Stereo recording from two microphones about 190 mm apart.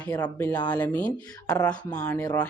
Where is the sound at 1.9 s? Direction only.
20° left (ahead or behind).